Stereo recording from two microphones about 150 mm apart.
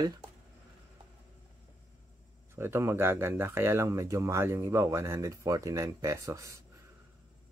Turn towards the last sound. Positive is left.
turn(degrees=-20)  # may be behind; listen again after turning